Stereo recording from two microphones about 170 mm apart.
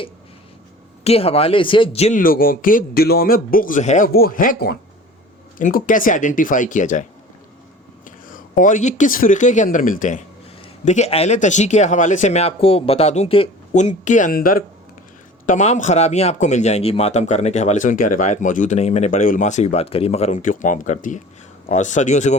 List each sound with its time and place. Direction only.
1.0 s speech: 35° left (ahead or behind)
4.1 s speech: 60° left (ahead or behind)
8.3 s speech: 50° left (ahead or behind)
10.8 s speech: 40° left (ahead or behind)
15.4 s speech: 45° left (ahead or behind)